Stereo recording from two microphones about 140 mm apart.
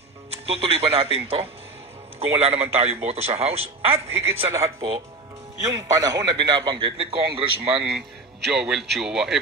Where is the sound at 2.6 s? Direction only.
45° right (ahead or behind).